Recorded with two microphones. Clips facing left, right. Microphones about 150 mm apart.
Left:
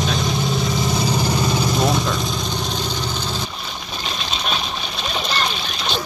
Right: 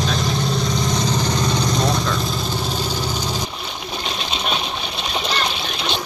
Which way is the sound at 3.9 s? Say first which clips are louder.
Right 1 dB; 15° right (ahead or behind).